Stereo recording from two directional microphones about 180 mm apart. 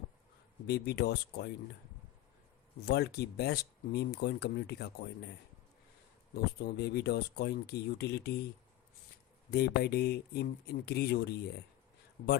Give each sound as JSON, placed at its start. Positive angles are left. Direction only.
{"t": 0.7, "sound": "speech", "side_deg": 65}
{"t": 2.8, "sound": "speech", "side_deg": 65}
{"t": 6.3, "sound": "speech", "side_deg": 60}
{"t": 9.5, "sound": "speech", "side_deg": 60}